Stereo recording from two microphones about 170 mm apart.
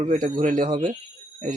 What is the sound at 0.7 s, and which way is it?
Speech, 30° right (ahead or behind).